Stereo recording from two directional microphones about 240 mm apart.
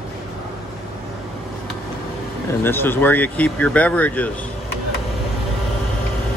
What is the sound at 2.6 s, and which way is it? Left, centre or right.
Speech, centre.